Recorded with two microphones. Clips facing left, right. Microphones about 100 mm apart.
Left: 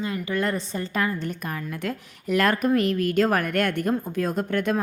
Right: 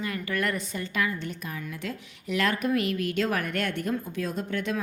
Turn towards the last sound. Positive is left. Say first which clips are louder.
# left 6 dB
turn(degrees=50)  # may be behind; listen again after turning